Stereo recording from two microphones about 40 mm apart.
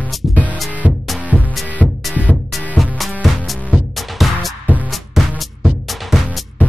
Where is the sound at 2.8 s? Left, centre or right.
Centre.